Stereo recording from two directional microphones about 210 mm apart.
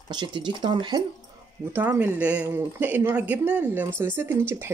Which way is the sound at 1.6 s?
10° right (ahead or behind).